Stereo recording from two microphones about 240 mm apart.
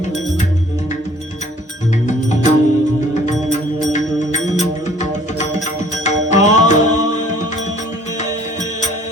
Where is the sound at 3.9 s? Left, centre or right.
Left.